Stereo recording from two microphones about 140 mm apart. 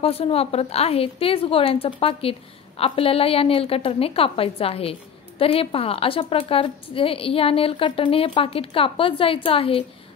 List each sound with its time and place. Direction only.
0.0 s a woman's voice: 45° left (ahead or behind)